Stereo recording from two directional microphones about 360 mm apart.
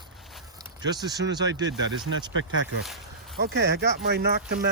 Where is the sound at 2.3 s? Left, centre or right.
Right.